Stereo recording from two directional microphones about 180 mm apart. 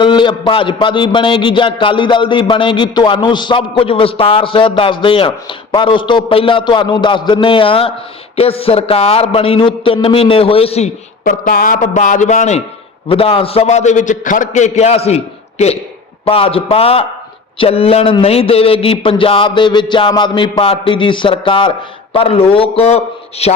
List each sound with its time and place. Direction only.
0.0 s a man's voice: 25° left (ahead or behind)
11.2 s a man's voice: 50° left (ahead or behind); by 23.6 s 35° left (ahead or behind)